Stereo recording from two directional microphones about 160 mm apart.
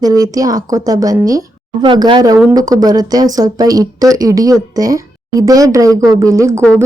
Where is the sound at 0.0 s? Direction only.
20° right (ahead or behind).